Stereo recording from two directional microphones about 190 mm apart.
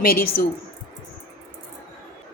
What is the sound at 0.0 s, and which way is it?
Speech, 50° left (ahead or behind).